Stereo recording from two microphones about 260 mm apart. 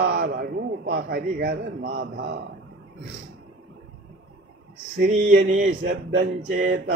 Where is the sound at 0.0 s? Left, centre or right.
Right.